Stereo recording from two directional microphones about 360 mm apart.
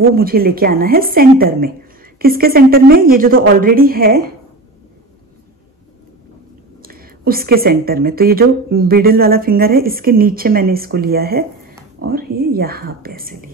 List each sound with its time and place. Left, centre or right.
0.0 s a woman's voice: right
6.8 s a woman's voice: right